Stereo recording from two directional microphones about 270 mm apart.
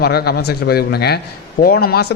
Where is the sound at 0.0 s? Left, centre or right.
Left.